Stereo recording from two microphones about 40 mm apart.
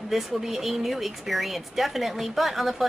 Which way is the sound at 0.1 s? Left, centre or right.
Centre.